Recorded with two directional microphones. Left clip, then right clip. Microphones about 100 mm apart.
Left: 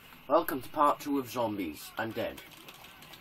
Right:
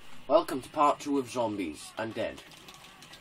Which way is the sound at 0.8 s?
Centre (ahead or behind).